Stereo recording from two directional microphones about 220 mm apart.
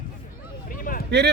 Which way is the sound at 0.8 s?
40° left (ahead or behind).